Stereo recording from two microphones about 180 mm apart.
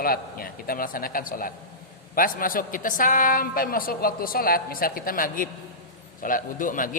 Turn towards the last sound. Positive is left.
turn(degrees=50)  # may be behind; listen again after turning